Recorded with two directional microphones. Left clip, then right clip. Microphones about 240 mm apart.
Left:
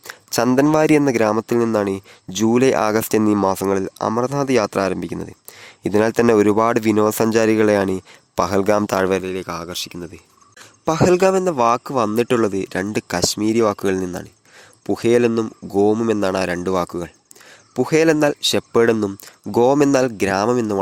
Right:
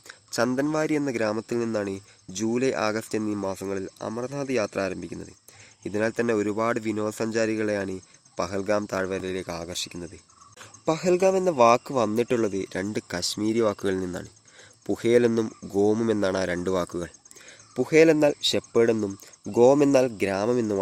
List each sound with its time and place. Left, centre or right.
0.0 s speech: left
9.2 s a man's voice: left